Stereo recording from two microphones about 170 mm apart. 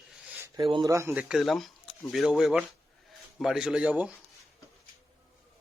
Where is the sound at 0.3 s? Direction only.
15° right (ahead or behind).